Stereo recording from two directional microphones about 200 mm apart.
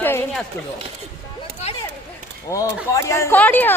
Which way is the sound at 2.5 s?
15° left (ahead or behind).